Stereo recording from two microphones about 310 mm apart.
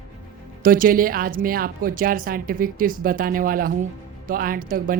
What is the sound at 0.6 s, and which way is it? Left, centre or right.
A woman's voice, right.